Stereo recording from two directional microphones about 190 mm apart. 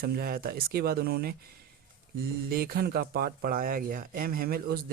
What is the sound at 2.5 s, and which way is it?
Speech, 50° right (ahead or behind).